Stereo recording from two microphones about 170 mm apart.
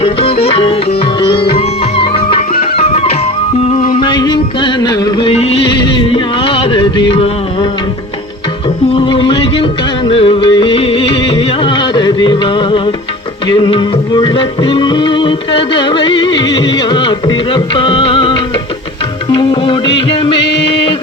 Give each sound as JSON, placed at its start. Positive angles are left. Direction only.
{"t": 0.0, "sound": "music", "side_deg": 35}
{"t": 5.3, "sound": "music", "side_deg": 35}
{"t": 9.0, "sound": "music", "side_deg": 30}